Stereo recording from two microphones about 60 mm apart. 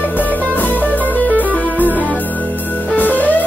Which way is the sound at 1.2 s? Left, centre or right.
Left.